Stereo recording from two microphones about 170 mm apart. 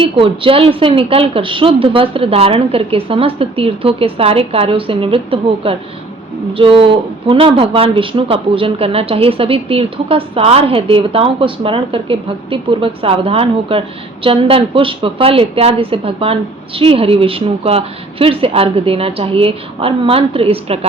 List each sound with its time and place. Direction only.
0.0 s speech: 30° right (ahead or behind)